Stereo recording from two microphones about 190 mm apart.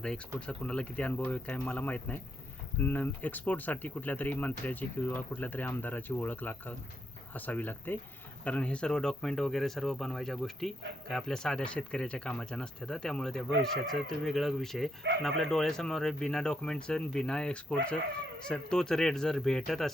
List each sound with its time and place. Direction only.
0.3 s speech: 5° left (ahead or behind)